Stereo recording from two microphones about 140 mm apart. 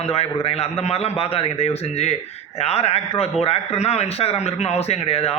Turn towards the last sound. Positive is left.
turn(degrees=45)  # may be behind; listen again after turning